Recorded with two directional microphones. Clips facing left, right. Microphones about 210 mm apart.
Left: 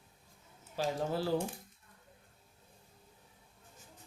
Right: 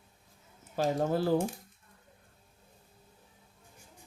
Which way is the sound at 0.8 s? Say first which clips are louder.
Right 5 dB; 50° right (ahead or behind).